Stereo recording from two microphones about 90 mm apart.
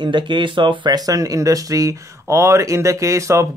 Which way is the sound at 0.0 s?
60° right (ahead or behind).